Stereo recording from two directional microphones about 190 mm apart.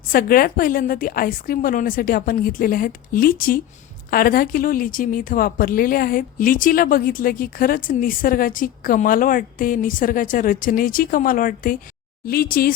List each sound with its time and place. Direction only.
0.1 s speech: 50° left (ahead or behind)